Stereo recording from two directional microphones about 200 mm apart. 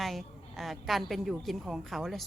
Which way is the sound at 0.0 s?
Centre (ahead or behind).